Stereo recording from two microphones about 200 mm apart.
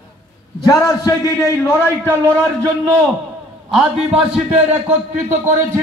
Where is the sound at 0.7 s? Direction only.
15° left (ahead or behind).